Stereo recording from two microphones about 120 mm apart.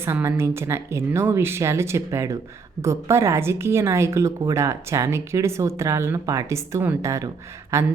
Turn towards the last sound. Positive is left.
turn(degrees=-25)  # may be behind; listen again after turning